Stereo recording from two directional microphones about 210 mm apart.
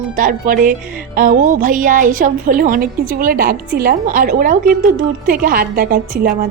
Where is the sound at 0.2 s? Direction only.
40° right (ahead or behind).